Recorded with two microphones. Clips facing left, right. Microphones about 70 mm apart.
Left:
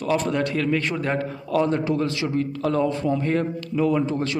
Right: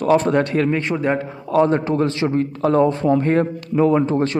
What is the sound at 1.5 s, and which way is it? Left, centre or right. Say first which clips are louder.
Speech: right 5 dB; right.